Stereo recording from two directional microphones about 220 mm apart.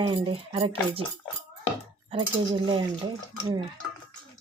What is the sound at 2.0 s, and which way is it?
Speech, 25° right (ahead or behind).